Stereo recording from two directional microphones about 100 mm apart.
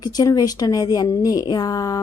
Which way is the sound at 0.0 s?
40° left (ahead or behind).